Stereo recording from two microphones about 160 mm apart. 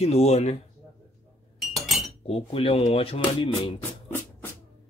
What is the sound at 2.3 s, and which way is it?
Speech, 35° left (ahead or behind).